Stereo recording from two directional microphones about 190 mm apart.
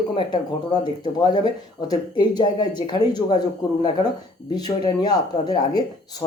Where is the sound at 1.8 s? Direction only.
20° left (ahead or behind).